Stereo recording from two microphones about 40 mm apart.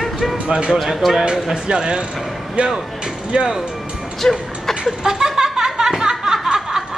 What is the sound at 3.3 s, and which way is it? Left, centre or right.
Speech, right.